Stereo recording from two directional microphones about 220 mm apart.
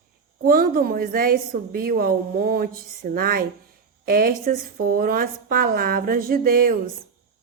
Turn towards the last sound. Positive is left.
turn(degrees=-40)  # may be behind; listen again after turning